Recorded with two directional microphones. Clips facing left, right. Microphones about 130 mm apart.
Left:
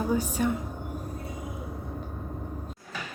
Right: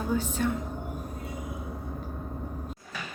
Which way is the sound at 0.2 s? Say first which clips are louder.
Left 2 dB; 10° left (ahead or behind).